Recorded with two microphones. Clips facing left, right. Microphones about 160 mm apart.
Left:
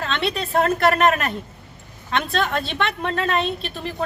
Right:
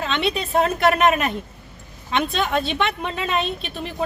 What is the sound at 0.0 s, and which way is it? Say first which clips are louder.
A woman's voice: right 1 dB; 15° right (ahead or behind).